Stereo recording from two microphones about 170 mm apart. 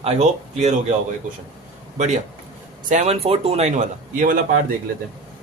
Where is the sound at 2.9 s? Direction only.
40° right (ahead or behind).